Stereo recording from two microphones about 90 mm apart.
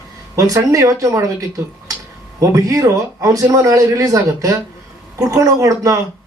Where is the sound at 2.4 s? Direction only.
40° right (ahead or behind).